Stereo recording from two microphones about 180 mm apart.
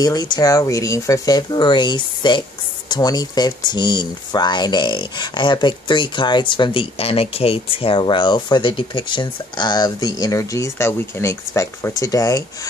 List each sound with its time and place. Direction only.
0.0 s speech: 20° left (ahead or behind)